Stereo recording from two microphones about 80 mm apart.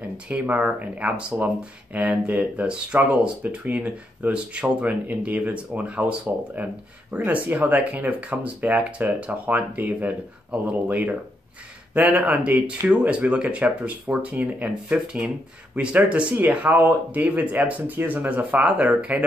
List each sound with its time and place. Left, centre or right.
0.3 s speech: centre